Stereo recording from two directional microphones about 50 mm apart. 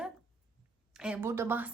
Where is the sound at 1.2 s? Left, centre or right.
Right.